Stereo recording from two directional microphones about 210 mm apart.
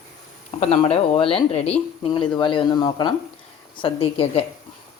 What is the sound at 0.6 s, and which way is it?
Speech, 30° left (ahead or behind).